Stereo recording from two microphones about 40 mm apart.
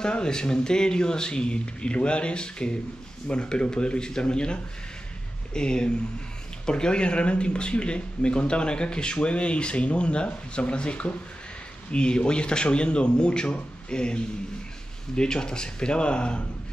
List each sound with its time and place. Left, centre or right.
0.0 s speech: centre